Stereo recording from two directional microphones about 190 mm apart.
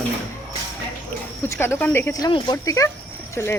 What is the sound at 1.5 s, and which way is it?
Speech, 10° left (ahead or behind).